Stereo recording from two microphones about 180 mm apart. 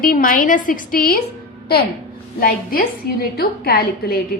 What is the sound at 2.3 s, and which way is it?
A woman's voice, 55° left (ahead or behind).